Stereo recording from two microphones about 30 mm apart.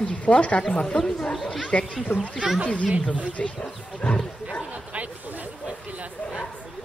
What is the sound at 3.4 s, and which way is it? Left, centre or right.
Speech, left.